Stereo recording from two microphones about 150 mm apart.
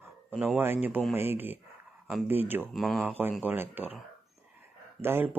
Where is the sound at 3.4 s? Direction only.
10° right (ahead or behind).